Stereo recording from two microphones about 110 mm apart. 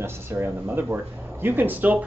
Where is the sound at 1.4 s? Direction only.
20° right (ahead or behind).